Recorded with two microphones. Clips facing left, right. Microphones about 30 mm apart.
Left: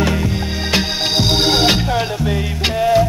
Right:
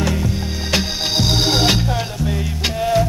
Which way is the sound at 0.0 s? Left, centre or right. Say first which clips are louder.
Left 3 dB; left.